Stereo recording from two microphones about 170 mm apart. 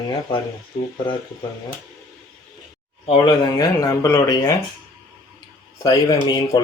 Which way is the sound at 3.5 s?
20° left (ahead or behind).